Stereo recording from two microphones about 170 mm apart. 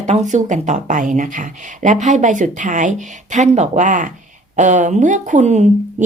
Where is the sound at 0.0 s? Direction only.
45° right (ahead or behind).